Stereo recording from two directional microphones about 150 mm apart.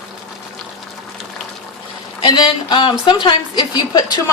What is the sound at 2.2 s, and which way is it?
A woman's voice, 30° left (ahead or behind).